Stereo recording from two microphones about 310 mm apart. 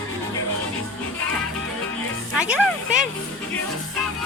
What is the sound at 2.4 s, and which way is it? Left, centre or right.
Speech, centre.